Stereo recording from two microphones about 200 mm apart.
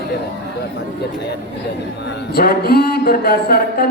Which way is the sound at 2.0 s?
55° left (ahead or behind).